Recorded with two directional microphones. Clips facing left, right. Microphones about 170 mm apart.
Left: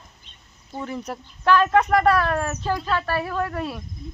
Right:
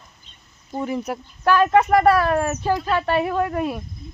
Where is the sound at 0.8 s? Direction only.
10° right (ahead or behind).